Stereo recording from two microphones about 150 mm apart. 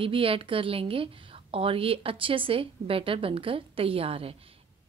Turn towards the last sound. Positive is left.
turn(degrees=-40)  # may be behind; listen again after turning